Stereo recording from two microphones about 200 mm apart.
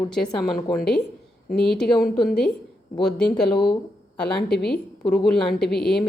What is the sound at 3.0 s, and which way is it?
Speech, 5° left (ahead or behind).